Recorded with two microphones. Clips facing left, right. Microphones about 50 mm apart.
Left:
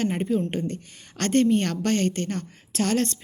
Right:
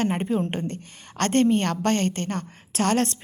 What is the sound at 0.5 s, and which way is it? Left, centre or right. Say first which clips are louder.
A woman's voice: left 1 dB; right.